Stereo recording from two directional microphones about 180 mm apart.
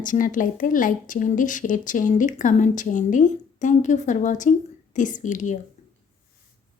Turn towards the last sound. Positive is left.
turn(degrees=45)  # may be behind; listen again after turning